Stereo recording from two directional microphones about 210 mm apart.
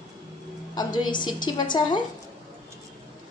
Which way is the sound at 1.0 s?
20° left (ahead or behind).